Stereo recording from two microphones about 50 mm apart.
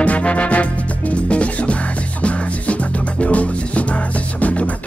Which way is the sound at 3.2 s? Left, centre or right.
Left.